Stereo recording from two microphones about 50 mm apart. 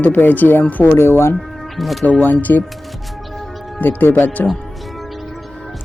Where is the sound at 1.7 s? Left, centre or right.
Centre.